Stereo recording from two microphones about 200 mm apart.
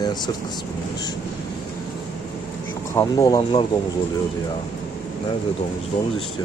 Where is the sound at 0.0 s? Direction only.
20° left (ahead or behind).